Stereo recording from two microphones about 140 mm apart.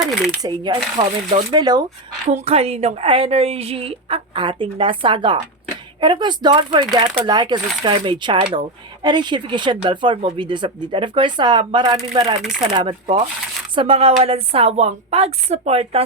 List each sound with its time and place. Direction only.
0.0 s a sound: centre (ahead or behind)
0.4 s speech: 30° right (ahead or behind)
2.3 s a woman's voice: 45° right (ahead or behind); by 12.4 s 30° right (ahead or behind)
12.4 s speech: 5° right (ahead or behind)
12.7 s a woman's voice: 35° right (ahead or behind)